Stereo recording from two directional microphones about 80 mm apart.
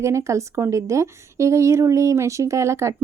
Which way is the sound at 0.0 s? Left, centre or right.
Right.